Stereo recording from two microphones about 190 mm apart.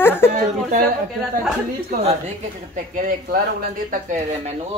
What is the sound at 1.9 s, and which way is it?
Speech, 40° right (ahead or behind).